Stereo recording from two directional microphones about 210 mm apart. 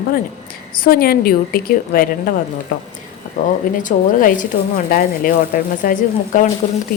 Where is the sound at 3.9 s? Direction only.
35° left (ahead or behind).